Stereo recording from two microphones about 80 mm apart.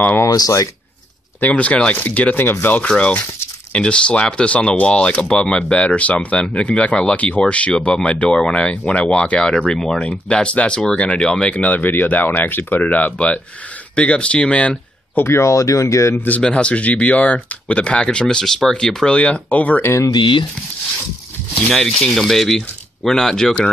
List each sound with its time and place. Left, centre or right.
0.2 s speech: left
1.4 s speech: centre
15.2 s speech: left
16.3 s speech: centre
19.8 s speech: left
20.1 s speech: left
21.6 s speech: centre